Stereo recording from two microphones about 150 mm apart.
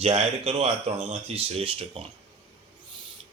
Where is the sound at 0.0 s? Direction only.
45° right (ahead or behind).